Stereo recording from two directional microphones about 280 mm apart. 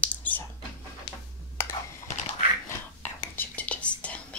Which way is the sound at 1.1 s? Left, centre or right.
Left.